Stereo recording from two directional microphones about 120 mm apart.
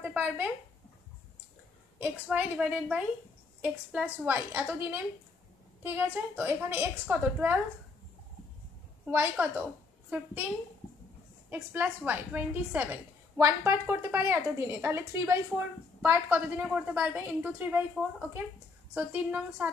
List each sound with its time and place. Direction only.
0.0 s a sound: 10° right (ahead or behind)
2.0 s a woman's voice: 10° right (ahead or behind)
9.0 s a woman's voice: 15° right (ahead or behind)
11.5 s a woman's voice: 15° right (ahead or behind)
18.9 s a woman's voice: 15° right (ahead or behind)